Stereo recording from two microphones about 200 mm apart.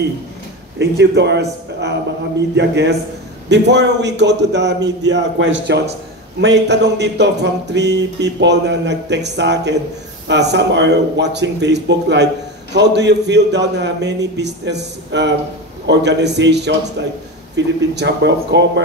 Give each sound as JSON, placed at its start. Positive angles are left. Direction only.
{"t": 0.7, "sound": "speech", "side_deg": -60}